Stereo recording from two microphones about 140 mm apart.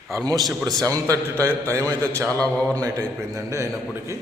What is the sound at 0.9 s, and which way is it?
A man's voice, 25° right (ahead or behind).